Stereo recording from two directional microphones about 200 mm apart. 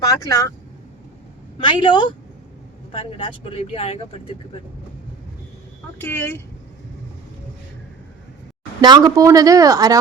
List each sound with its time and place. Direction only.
0.0 s speech: 15° left (ahead or behind)
1.6 s speech: 25° left (ahead or behind)
6.0 s speech: 10° left (ahead or behind)
8.8 s speech: 20° right (ahead or behind)